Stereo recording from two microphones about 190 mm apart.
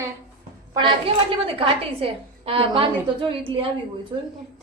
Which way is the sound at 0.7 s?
25° right (ahead or behind).